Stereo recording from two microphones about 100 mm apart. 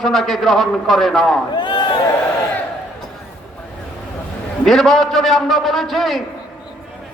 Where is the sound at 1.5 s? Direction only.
50° left (ahead or behind).